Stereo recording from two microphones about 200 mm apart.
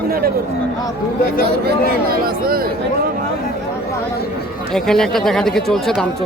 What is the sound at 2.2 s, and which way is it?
Speech, 50° right (ahead or behind).